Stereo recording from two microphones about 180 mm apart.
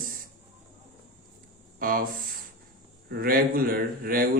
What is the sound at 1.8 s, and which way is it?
Speech, 50° right (ahead or behind).